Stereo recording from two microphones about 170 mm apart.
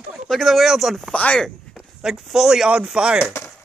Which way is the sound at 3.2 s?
15° left (ahead or behind).